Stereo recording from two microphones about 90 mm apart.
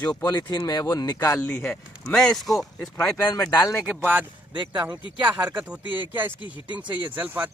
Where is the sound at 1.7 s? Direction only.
5° left (ahead or behind).